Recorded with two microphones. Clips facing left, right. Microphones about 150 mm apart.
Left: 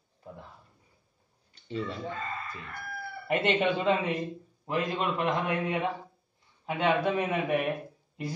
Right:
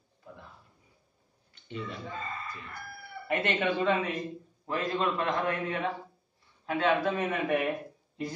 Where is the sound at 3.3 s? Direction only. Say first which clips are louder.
Left 3 dB; 20° left (ahead or behind).